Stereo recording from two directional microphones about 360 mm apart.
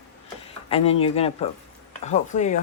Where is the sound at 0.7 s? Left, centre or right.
Centre.